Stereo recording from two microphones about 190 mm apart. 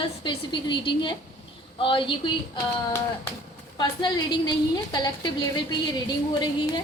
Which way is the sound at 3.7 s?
25° left (ahead or behind).